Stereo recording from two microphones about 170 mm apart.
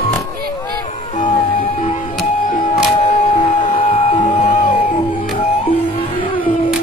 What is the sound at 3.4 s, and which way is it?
Music, 30° left (ahead or behind).